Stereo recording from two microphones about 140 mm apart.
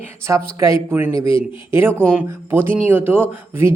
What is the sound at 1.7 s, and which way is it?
Speech, 15° right (ahead or behind).